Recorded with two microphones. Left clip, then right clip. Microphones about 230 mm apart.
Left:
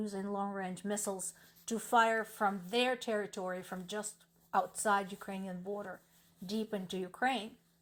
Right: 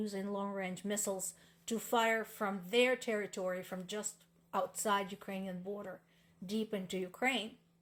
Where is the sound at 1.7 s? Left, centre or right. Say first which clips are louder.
Left 3 dB; left.